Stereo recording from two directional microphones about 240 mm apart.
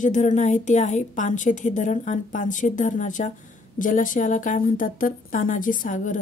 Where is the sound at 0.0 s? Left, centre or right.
Left.